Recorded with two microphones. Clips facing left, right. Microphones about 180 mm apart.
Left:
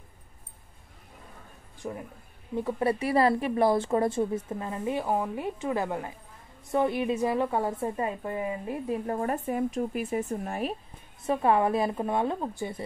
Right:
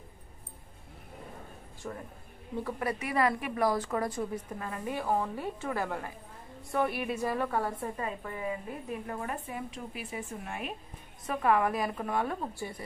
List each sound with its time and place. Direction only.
1.8 s speech: 15° left (ahead or behind)
2.8 s a woman's voice: 30° left (ahead or behind)
11.2 s a woman's voice: 30° left (ahead or behind)